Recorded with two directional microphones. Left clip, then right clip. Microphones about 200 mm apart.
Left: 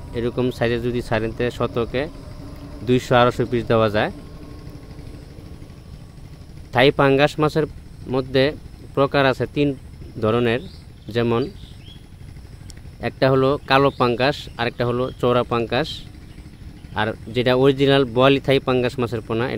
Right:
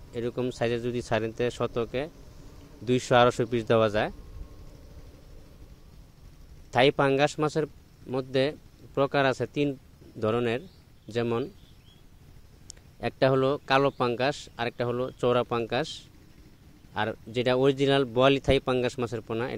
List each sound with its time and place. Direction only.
0.1 s speech: 30° right (ahead or behind)
6.7 s speech: 35° right (ahead or behind)
13.0 s speech: 35° right (ahead or behind)